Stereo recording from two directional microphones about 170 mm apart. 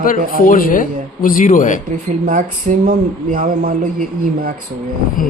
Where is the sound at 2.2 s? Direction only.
50° right (ahead or behind).